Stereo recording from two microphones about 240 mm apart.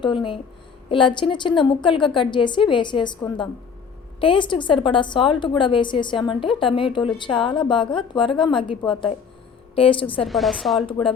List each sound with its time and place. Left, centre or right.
0.0 s a woman's voice: centre
10.2 s speech: centre
10.8 s a woman's voice: left